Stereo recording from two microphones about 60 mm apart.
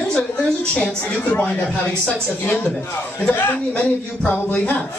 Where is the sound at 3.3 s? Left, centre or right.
Left.